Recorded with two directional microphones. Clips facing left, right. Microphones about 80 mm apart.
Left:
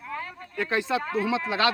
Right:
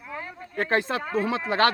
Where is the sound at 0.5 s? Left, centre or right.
Right.